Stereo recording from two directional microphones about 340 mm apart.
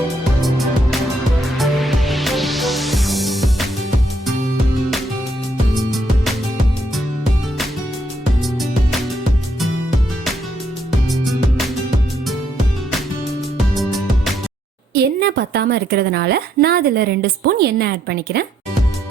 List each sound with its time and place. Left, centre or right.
0.4 s music: centre
11.1 s music: centre
14.9 s a woman's voice: right